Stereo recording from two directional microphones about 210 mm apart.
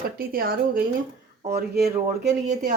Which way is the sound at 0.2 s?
45° right (ahead or behind).